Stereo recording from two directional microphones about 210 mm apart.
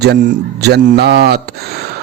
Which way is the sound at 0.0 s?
50° right (ahead or behind).